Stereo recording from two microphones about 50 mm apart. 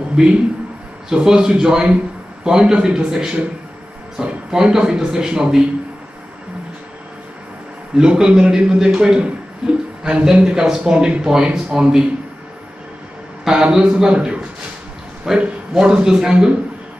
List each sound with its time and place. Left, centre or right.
0.1 s a man's voice: centre
7.9 s a man's voice: centre
13.5 s a man's voice: centre